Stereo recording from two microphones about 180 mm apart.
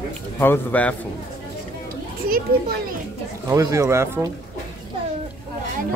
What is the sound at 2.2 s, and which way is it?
Speech, 55° right (ahead or behind).